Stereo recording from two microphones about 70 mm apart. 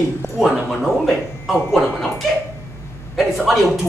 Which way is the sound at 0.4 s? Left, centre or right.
Centre.